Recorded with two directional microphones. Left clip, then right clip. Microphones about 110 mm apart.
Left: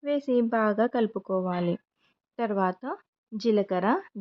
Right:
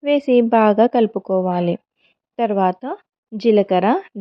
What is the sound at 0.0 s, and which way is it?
Speech, 55° right (ahead or behind).